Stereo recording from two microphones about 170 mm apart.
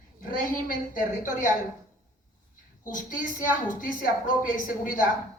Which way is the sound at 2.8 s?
50° left (ahead or behind).